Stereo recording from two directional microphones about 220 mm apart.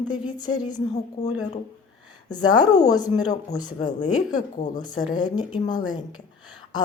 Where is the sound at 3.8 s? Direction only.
35° left (ahead or behind).